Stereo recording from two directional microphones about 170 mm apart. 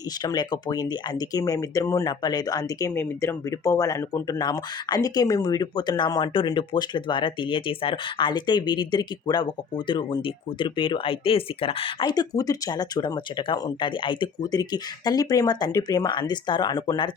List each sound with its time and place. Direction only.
0.2 s speech: 25° left (ahead or behind)